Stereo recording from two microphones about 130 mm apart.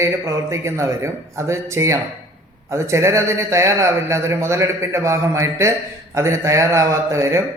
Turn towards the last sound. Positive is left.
turn(degrees=-20)  # may be behind; listen again after turning